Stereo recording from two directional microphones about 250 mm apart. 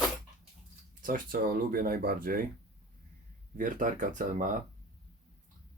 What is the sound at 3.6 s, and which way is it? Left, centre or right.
Speech, right.